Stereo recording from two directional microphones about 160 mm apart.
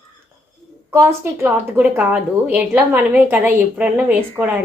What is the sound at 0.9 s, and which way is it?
A woman's voice, 15° right (ahead or behind).